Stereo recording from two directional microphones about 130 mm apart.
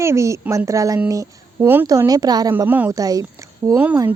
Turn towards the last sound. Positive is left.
turn(degrees=-10)  # may be behind; listen again after turning